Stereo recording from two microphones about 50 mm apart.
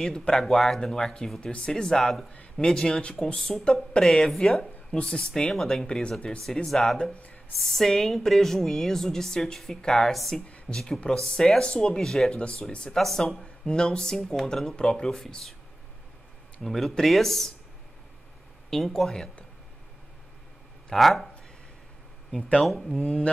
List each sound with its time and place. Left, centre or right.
0.3 s a woman's voice: centre
5.9 s a woman's voice: centre
7.2 s a sound: left
7.6 s a woman's voice: centre
12.4 s speech: left
12.9 s a woman's voice: centre
15.0 s speech: centre
16.6 s speech: centre
18.7 s a woman's voice: centre
20.9 s speech: centre
22.7 s speech: centre
22.9 s speech: centre